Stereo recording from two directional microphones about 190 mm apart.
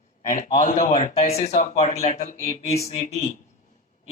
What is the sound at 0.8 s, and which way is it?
Speech, 35° left (ahead or behind).